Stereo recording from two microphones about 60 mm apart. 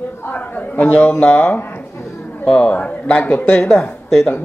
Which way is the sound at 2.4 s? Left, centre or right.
Centre.